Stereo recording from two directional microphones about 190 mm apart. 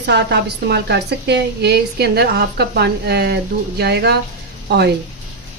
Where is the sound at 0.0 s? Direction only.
65° right (ahead or behind).